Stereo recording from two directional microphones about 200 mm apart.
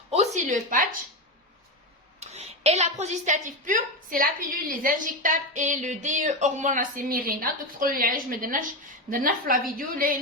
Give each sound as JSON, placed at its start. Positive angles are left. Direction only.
{"t": 0.3, "sound": "a woman's voice", "side_deg": -40}
{"t": 2.2, "sound": "a woman's voice", "side_deg": -35}